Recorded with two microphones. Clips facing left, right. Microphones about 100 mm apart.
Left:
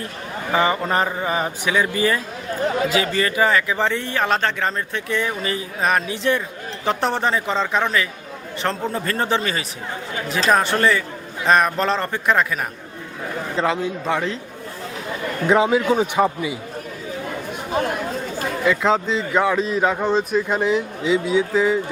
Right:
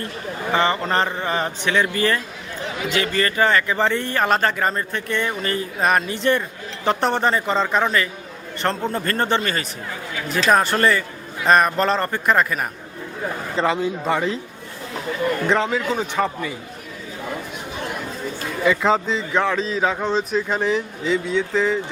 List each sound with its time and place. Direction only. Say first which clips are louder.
0.5 s a man's voice: left 1 dB; 10° left (ahead or behind)
2.6 s a man's voice: left 7 dB; 40° left (ahead or behind)
2.9 s speech: left 1 dB; 10° left (ahead or behind)
13.6 s speech: right 1 dB; centre (ahead or behind)
15.4 s a man's voice: left 8 dB; 10° left (ahead or behind)
18.6 s speech: right 1 dB; centre (ahead or behind)